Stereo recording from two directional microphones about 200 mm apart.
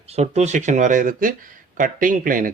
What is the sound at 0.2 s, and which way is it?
Speech, 35° right (ahead or behind).